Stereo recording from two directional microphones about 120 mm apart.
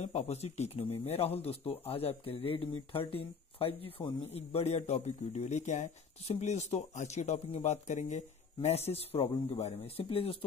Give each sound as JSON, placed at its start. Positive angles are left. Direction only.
{"t": 0.0, "sound": "speech", "side_deg": 70}